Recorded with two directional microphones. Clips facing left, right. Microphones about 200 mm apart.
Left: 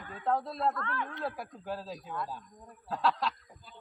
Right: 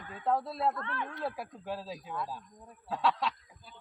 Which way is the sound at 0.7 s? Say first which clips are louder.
Left 1 dB; 20° right (ahead or behind).